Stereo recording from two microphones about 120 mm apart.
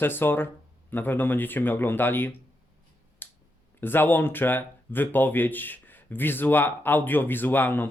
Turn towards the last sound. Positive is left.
turn(degrees=15)  # may be behind; listen again after turning